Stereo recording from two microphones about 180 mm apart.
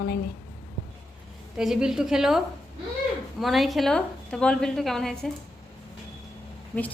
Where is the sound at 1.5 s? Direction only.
5° right (ahead or behind).